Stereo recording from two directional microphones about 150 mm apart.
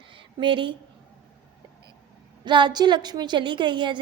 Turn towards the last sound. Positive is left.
turn(degrees=-30)  # may be behind; listen again after turning